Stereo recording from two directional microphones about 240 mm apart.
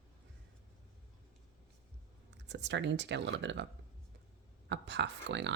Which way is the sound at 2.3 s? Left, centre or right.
Right.